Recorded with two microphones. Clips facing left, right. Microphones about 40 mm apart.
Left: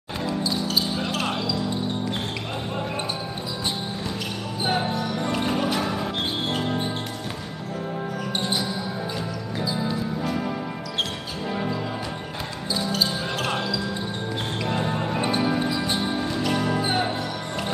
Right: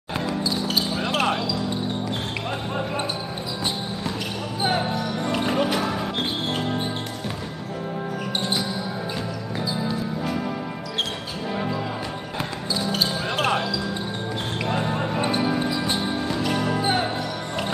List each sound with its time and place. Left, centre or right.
4.6 s basketball bounce: centre
5.3 s music: centre
6.5 s music: centre
9.6 s music: centre
11.5 s music: centre
14.7 s music: centre